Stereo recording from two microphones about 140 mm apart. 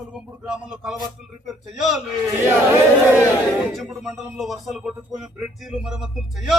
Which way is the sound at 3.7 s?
Centre (ahead or behind).